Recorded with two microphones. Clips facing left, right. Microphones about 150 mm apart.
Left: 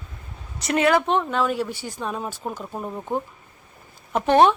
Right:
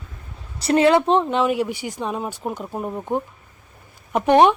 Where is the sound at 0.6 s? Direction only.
30° right (ahead or behind).